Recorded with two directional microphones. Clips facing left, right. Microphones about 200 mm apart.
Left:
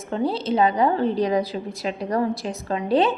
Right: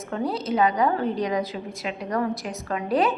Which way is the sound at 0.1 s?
30° left (ahead or behind).